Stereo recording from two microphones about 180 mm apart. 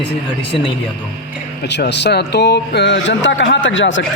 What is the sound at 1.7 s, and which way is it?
Speech, 70° left (ahead or behind).